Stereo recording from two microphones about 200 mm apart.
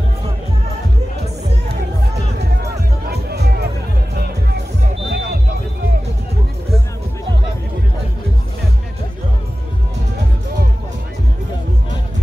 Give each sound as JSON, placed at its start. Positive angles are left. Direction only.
{"t": 2.1, "sound": "music", "side_deg": -55}